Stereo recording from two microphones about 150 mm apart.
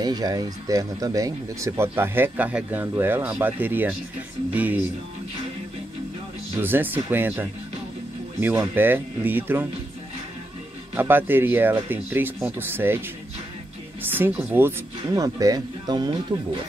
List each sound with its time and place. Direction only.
0.0 s speech: 25° right (ahead or behind); by 4.7 s 10° right (ahead or behind)
6.6 s speech: 15° right (ahead or behind)
11.0 s speech: 15° right (ahead or behind)
14.1 s speech: 10° right (ahead or behind); by 16.3 s 30° right (ahead or behind)